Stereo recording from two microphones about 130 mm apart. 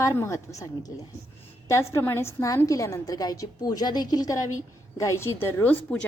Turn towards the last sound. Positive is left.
turn(degrees=10)  # may be behind; listen again after turning